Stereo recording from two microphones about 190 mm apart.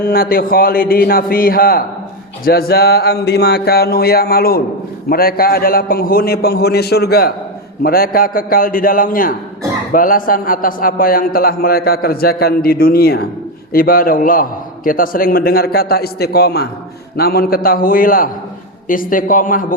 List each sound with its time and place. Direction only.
0.0 s a man's voice: 50° left (ahead or behind)
2.4 s a sound: 50° left (ahead or behind)
5.0 s a man's voice: 50° left (ahead or behind)